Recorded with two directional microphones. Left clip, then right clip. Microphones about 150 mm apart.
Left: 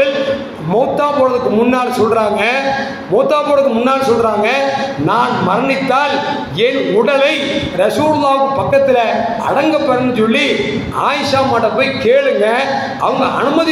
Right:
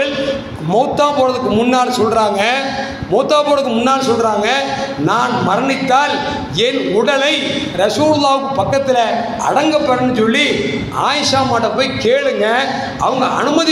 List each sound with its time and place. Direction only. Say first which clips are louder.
0.7 s a man's voice: even; 30° right (ahead or behind)
9.6 s a man's voice: even; 25° right (ahead or behind)